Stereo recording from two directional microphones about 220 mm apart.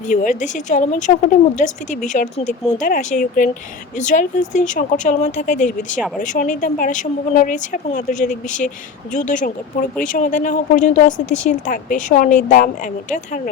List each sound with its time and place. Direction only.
0.1 s speech: 35° left (ahead or behind)